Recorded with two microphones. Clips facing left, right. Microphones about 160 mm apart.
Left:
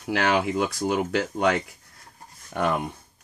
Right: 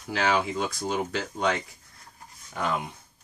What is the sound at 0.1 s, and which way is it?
Speech, 65° left (ahead or behind).